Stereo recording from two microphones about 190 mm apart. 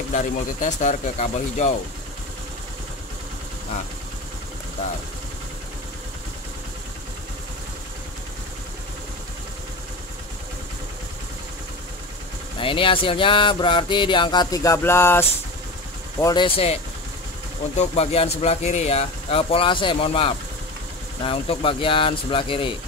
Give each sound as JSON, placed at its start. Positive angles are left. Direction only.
{"t": 0.1, "sound": "speech", "side_deg": 40}
{"t": 12.5, "sound": "speech", "side_deg": 25}
{"t": 16.4, "sound": "speech", "side_deg": 30}